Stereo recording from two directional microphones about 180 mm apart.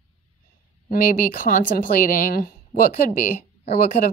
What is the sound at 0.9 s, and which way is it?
A woman's voice, 50° left (ahead or behind).